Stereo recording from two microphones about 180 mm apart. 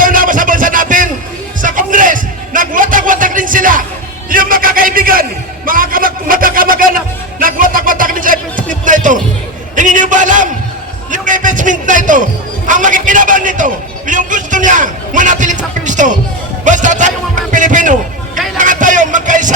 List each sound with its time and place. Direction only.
0.0 s music: 50° right (ahead or behind)
1.6 s a sound: 50° right (ahead or behind)
18.5 s music: 45° right (ahead or behind)